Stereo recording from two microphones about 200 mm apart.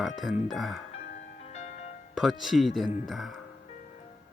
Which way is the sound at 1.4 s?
35° left (ahead or behind).